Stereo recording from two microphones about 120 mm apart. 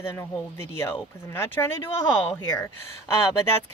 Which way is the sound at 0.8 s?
20° left (ahead or behind).